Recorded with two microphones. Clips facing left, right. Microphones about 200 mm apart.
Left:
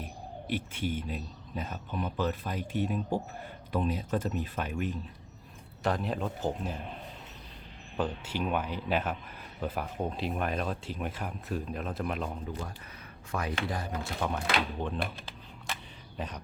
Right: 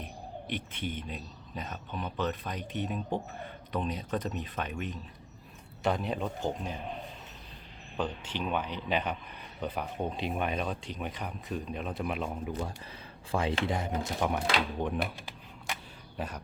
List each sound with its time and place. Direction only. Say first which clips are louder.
0.0 s speech: even; 5° left (ahead or behind)
7.9 s speech: left 2 dB; 5° left (ahead or behind)
13.3 s speech: right 3 dB; 30° right (ahead or behind); by 16.4 s 5° right (ahead or behind)